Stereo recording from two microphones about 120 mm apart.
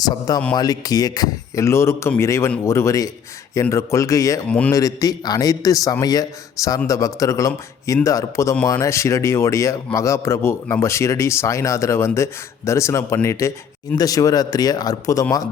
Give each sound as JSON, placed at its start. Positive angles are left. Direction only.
{"t": 0.0, "sound": "a man's voice", "side_deg": 35}
{"t": 4.4, "sound": "a man's voice", "side_deg": 10}
{"t": 4.7, "sound": "a man's voice", "side_deg": 30}